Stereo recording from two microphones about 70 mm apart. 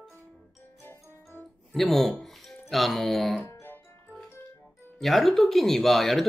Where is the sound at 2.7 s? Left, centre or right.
Centre.